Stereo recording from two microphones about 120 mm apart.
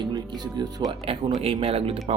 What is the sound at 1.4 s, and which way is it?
Speech, 50° right (ahead or behind).